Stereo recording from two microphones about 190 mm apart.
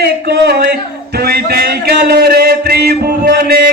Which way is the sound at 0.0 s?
55° right (ahead or behind).